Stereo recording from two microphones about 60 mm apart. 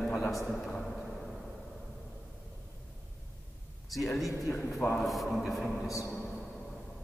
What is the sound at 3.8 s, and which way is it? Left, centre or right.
Speech, centre.